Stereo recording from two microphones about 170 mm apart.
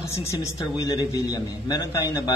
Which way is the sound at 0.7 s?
20° left (ahead or behind).